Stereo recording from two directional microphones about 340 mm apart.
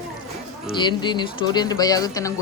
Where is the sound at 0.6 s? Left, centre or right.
Centre.